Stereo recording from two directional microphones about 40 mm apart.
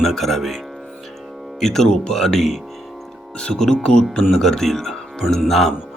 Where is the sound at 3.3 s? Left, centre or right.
Left.